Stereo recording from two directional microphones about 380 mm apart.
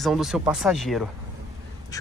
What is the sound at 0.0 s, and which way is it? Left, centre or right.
Speech, centre.